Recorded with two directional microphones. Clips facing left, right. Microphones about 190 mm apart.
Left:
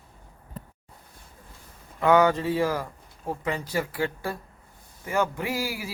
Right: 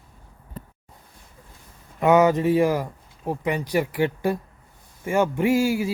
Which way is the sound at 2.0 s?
20° right (ahead or behind).